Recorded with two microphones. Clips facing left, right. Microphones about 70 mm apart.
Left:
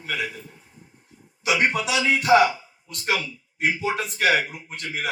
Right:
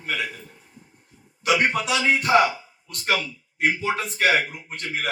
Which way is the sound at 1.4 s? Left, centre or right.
Right.